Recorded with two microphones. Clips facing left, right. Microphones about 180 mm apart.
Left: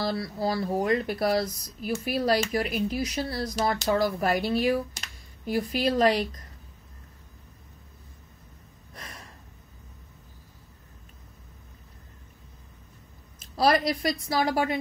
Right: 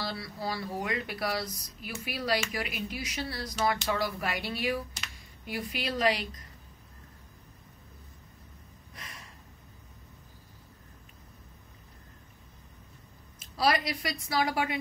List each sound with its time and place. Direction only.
0.0 s speech: 40° left (ahead or behind)
8.9 s gasp: 40° left (ahead or behind)
13.6 s speech: 45° left (ahead or behind)